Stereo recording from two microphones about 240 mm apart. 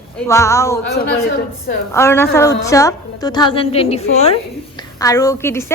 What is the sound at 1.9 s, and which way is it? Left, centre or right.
A woman's voice, centre.